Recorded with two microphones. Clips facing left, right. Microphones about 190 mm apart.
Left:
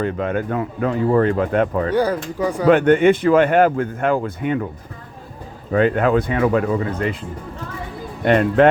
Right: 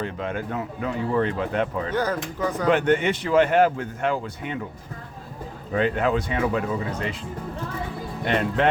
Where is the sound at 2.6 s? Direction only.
55° left (ahead or behind).